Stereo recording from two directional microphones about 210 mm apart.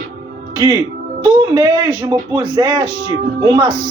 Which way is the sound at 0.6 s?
20° right (ahead or behind).